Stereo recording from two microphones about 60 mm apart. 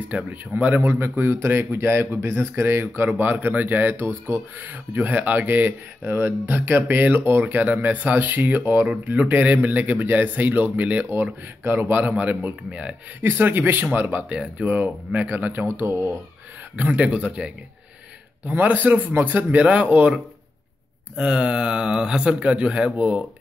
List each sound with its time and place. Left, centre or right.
0.1 s a man's voice: right
11.6 s a man's voice: right
13.2 s speech: right
14.3 s a man's voice: centre
15.6 s speech: right
16.7 s a man's voice: right
18.4 s a man's voice: right
19.6 s a man's voice: right
21.2 s speech: centre